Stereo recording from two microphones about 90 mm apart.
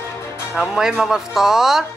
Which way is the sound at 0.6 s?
5° right (ahead or behind).